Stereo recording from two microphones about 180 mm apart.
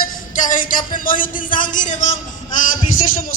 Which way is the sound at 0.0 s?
45° left (ahead or behind).